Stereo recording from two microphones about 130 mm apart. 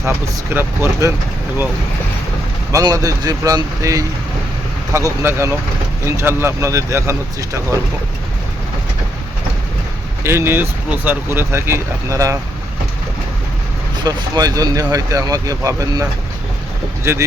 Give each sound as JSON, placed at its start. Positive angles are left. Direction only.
{"t": 0.5, "sound": "speech", "side_deg": -20}
{"t": 2.7, "sound": "speech", "side_deg": -25}
{"t": 10.2, "sound": "speech", "side_deg": -20}
{"t": 14.0, "sound": "speech", "side_deg": -30}